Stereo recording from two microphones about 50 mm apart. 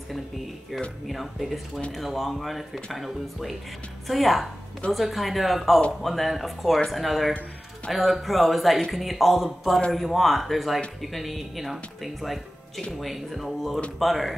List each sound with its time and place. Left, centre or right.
1.0 s speech: centre